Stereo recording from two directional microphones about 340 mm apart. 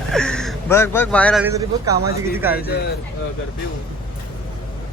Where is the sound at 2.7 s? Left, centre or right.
Left.